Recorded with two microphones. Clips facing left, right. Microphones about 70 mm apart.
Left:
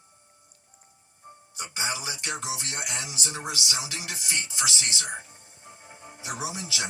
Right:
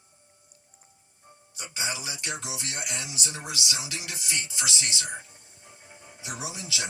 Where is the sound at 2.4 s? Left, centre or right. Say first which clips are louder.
Left 2 dB; left.